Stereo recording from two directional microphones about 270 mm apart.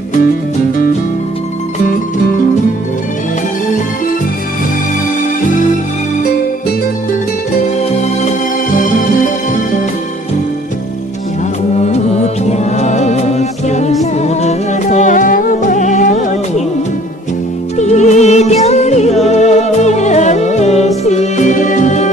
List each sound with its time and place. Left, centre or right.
12.5 s music: left
17.7 s music: left